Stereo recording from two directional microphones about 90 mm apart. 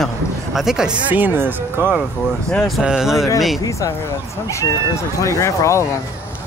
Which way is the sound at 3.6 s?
35° left (ahead or behind).